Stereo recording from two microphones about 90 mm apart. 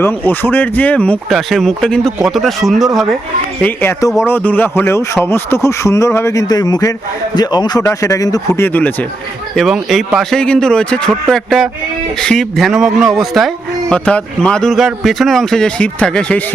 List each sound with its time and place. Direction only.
0.0 s speech: 20° left (ahead or behind)
1.3 s speech: 5° left (ahead or behind)
3.6 s speech: 20° left (ahead or behind); by 7.9 s 50° left (ahead or behind)
7.9 s speech: 35° left (ahead or behind)
8.6 s speech: 20° left (ahead or behind)
9.6 s speech: centre (ahead or behind)
12.2 s speech: 10° left (ahead or behind)
12.5 s speech: centre (ahead or behind)
13.9 s speech: 10° left (ahead or behind)